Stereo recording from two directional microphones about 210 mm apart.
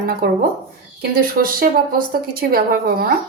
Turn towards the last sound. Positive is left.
turn(degrees=-45)  # may be behind; listen again after turning